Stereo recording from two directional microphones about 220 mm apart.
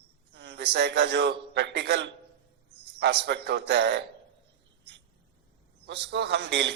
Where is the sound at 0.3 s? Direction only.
50° right (ahead or behind).